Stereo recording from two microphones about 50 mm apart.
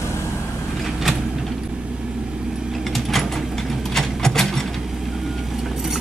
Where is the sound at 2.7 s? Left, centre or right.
Centre.